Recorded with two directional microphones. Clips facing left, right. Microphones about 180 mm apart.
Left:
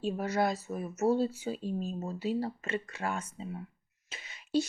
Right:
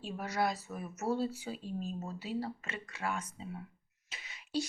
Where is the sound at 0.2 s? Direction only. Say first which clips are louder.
Even; 25° left (ahead or behind).